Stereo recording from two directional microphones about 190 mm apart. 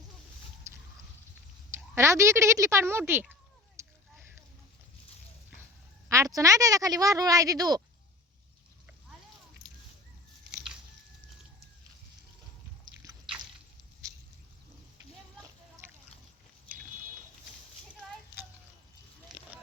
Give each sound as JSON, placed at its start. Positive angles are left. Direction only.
{"t": 2.0, "sound": "a woman's voice", "side_deg": -15}
{"t": 6.1, "sound": "a woman's voice", "side_deg": -15}